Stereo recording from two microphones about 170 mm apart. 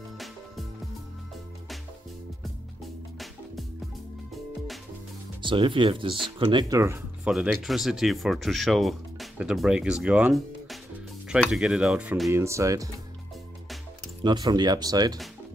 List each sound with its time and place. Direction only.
5.4 s speech: 30° right (ahead or behind)
7.2 s speech: centre (ahead or behind); by 12.9 s 20° right (ahead or behind)
14.2 s speech: 25° right (ahead or behind)